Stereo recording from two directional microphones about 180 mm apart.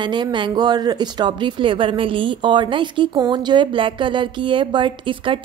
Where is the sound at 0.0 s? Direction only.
25° right (ahead or behind).